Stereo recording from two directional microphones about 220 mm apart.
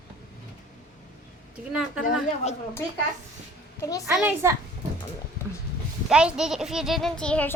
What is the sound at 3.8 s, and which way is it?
Speech, 15° left (ahead or behind).